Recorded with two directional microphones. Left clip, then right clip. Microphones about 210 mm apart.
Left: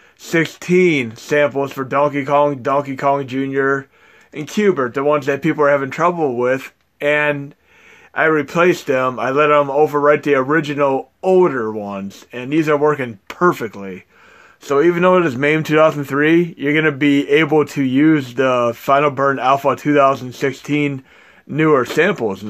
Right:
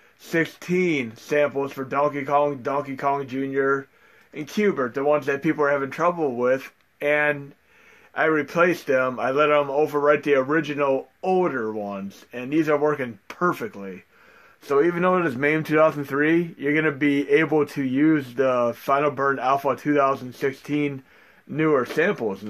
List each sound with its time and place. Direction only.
0.2 s speech: 40° left (ahead or behind)